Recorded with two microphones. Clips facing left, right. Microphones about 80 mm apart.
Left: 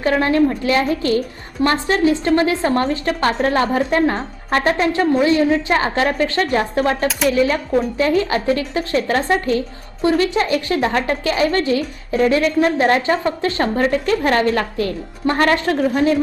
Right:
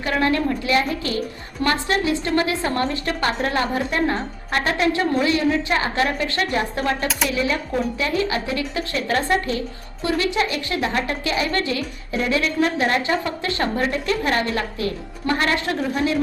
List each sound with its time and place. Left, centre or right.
0.0 s speech: left